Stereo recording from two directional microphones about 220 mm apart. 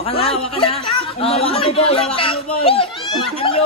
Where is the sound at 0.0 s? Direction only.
25° left (ahead or behind).